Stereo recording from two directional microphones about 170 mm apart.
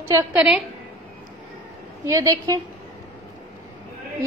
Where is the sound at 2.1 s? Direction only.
20° right (ahead or behind).